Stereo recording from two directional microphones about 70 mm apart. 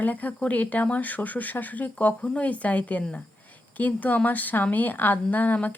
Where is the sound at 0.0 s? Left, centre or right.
Left.